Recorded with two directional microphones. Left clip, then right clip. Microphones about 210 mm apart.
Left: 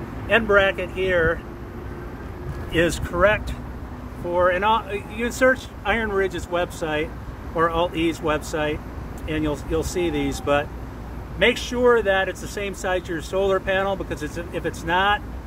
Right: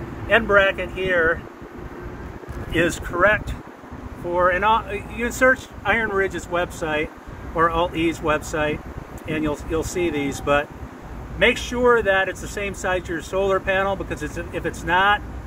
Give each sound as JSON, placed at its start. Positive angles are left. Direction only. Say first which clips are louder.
{"t": 0.3, "sound": "speech", "louder": "right 1 dB", "side_deg": 25}
{"t": 2.7, "sound": "speech", "louder": "even", "side_deg": 15}
{"t": 4.3, "sound": "speech", "louder": "right 1 dB", "side_deg": 15}
{"t": 8.4, "sound": "speech", "louder": "right 1 dB", "side_deg": 20}